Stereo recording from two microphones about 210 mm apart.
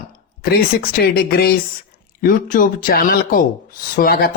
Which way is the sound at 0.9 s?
45° left (ahead or behind).